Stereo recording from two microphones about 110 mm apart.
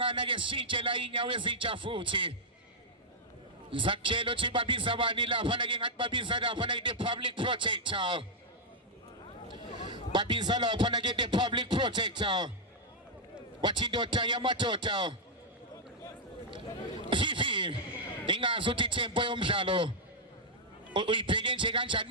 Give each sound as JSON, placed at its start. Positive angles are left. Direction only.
{"t": 0.0, "sound": "a man's voice", "side_deg": -50}
{"t": 3.7, "sound": "a man's voice", "side_deg": -50}
{"t": 9.5, "sound": "a man's voice", "side_deg": -45}
{"t": 13.6, "sound": "a man's voice", "side_deg": -45}
{"t": 17.1, "sound": "a sound", "side_deg": -45}
{"t": 18.3, "sound": "a man's voice", "side_deg": -50}
{"t": 20.9, "sound": "a man's voice", "side_deg": -50}